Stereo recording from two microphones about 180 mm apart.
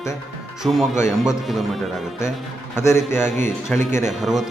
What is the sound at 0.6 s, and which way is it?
Speech, centre (ahead or behind).